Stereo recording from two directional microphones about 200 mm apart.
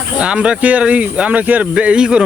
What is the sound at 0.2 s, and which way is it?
Speech, 5° right (ahead or behind).